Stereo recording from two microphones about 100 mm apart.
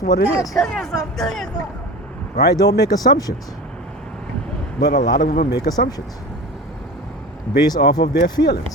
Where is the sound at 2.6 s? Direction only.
40° left (ahead or behind).